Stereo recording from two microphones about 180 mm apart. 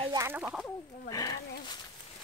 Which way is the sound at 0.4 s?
Centre (ahead or behind).